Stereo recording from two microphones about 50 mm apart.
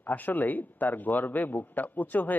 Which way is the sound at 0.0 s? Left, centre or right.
Left.